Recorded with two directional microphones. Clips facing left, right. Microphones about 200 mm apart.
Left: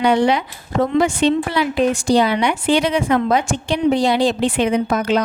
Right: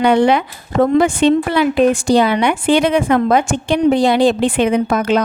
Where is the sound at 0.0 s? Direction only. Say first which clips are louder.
Right 3 dB; 55° right (ahead or behind).